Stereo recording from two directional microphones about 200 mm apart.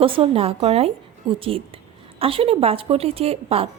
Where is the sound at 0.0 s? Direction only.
25° right (ahead or behind).